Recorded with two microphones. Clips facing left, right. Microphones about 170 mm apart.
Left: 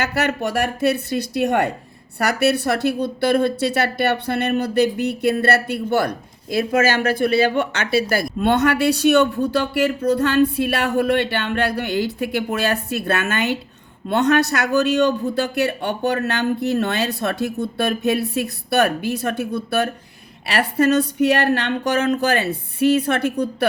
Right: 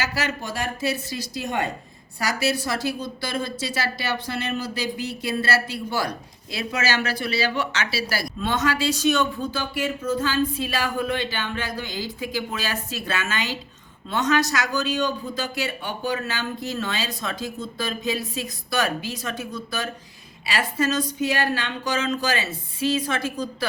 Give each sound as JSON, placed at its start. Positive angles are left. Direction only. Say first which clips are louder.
{"t": 0.0, "sound": "a woman's voice", "louder": "left 7 dB", "side_deg": 60}